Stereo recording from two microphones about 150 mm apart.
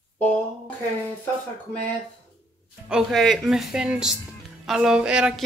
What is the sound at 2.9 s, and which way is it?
Speech, 5° right (ahead or behind).